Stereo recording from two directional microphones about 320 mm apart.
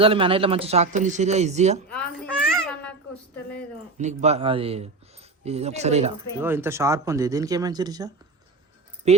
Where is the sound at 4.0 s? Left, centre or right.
Right.